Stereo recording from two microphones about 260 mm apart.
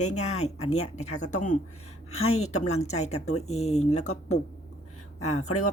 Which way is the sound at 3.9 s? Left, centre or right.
Left.